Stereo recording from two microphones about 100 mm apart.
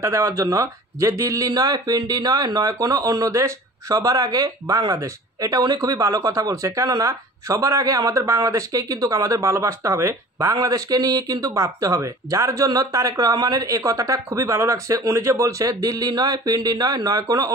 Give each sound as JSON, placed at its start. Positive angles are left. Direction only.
{"t": 0.0, "sound": "speech", "side_deg": -30}